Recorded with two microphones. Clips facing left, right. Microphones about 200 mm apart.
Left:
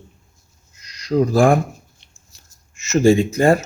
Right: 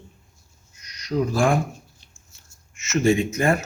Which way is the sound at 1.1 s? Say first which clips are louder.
Left 6 dB; 45° left (ahead or behind).